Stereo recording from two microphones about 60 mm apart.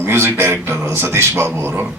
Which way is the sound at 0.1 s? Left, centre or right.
Right.